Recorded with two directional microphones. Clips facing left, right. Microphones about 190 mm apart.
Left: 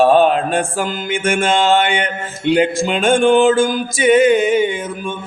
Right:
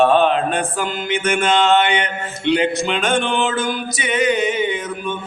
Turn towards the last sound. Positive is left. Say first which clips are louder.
# left 2 dB
turn(degrees=50)  # may be behind; listen again after turning